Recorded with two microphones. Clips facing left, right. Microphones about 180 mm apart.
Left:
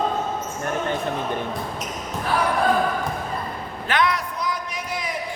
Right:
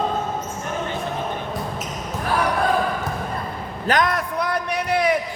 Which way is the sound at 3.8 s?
40° right (ahead or behind).